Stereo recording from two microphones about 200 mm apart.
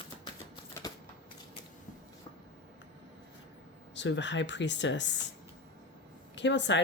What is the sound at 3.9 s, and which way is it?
Speech, 65° left (ahead or behind).